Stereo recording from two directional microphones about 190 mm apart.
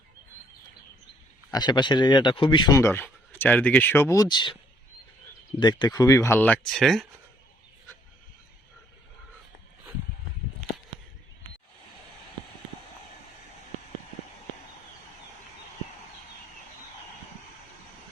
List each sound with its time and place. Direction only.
1.5 s speech: 20° left (ahead or behind)
5.5 s speech: 20° left (ahead or behind); by 7.1 s centre (ahead or behind)